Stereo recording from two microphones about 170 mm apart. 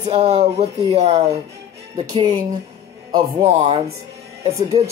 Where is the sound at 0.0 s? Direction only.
40° right (ahead or behind).